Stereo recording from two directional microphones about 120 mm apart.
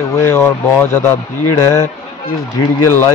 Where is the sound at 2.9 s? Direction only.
25° left (ahead or behind).